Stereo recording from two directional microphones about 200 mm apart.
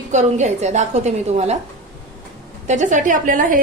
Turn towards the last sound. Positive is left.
turn(degrees=-40)  # may be behind; listen again after turning